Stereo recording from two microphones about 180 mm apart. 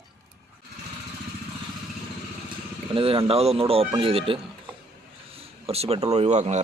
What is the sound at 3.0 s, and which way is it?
Speech, 30° right (ahead or behind).